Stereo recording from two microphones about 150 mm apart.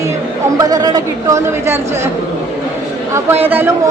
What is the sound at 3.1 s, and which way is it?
Speech, 15° right (ahead or behind).